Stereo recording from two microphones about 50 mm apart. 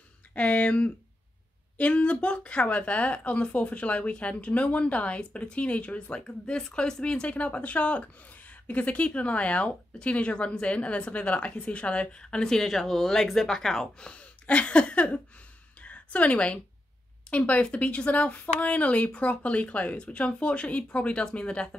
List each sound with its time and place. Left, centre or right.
0.3 s speech: left; by 14.0 s centre
14.0 s a sound: left
17.3 s speech: left